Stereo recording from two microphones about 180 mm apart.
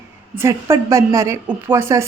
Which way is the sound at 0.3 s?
15° right (ahead or behind).